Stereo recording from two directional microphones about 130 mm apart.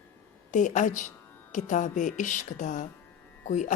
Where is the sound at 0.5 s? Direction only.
70° left (ahead or behind).